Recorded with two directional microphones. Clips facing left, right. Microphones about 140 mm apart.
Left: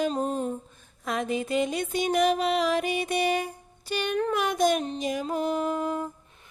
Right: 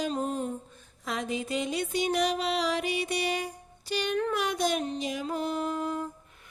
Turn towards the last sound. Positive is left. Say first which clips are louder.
# left 3 dB
turn(degrees=45)  # may be behind; listen again after turning